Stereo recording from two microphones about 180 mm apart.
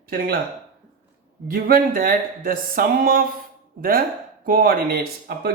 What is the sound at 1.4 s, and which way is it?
Speech, 55° right (ahead or behind).